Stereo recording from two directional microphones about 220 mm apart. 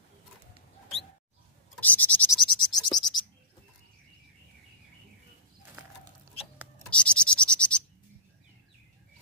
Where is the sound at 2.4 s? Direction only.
20° left (ahead or behind).